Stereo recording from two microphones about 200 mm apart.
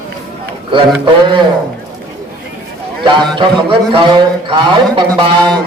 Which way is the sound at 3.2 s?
25° right (ahead or behind).